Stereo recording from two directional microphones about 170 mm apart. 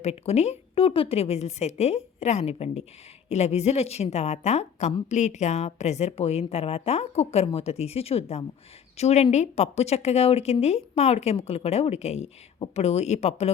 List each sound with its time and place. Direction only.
0.0 s a woman's voice: 40° left (ahead or behind)